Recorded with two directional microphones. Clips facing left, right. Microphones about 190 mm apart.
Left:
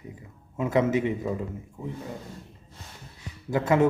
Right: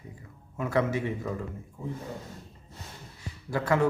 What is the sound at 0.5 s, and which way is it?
A man's voice, 20° left (ahead or behind).